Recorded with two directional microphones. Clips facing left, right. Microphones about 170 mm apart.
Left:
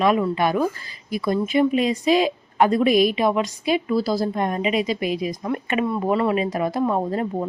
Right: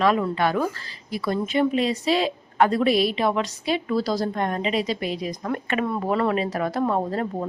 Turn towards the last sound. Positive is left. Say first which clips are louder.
# left 2 dB
turn(degrees=15)  # may be behind; listen again after turning